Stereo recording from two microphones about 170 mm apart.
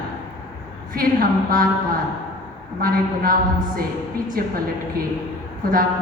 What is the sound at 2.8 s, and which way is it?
A woman's voice, 55° right (ahead or behind).